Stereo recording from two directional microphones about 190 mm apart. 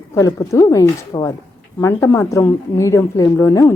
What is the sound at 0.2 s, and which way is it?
A woman's voice, 15° left (ahead or behind).